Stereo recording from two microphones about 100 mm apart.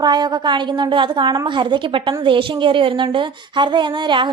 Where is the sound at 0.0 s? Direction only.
45° right (ahead or behind).